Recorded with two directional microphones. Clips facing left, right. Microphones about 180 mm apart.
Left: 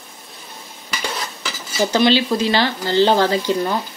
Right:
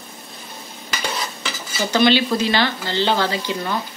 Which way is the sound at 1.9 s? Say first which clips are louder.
Even; 30° left (ahead or behind).